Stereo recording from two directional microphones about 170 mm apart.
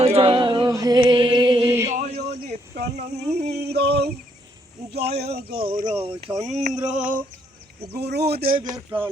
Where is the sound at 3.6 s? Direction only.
75° right (ahead or behind).